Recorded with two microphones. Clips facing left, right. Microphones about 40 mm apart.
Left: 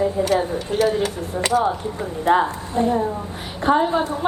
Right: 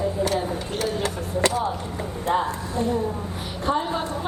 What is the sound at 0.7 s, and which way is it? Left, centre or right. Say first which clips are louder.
Speech: left 10 dB; centre.